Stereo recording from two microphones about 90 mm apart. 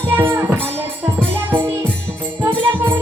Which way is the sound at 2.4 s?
20° right (ahead or behind).